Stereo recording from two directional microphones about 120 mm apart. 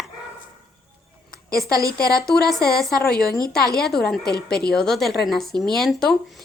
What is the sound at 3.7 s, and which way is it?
Speech, 5° left (ahead or behind).